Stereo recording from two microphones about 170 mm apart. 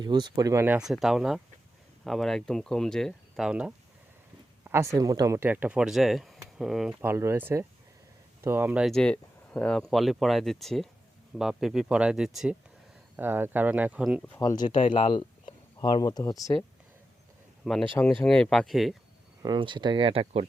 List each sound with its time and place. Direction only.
0.0 s speech: 25° right (ahead or behind); by 3.7 s 5° right (ahead or behind)
4.7 s speech: 15° right (ahead or behind)
7.0 s speech: 15° right (ahead or behind)
14.3 s speech: 25° left (ahead or behind)
17.9 s speech: 10° left (ahead or behind)
19.4 s speech: 25° right (ahead or behind)